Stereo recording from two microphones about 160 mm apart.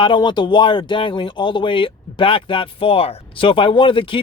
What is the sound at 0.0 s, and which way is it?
Speech, 30° left (ahead or behind).